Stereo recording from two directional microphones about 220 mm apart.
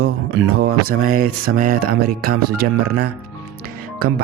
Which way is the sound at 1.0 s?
40° right (ahead or behind).